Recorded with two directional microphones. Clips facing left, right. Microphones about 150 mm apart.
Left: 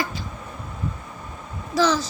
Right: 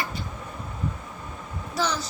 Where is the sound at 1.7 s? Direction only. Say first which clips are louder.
Left 7 dB; 90° left.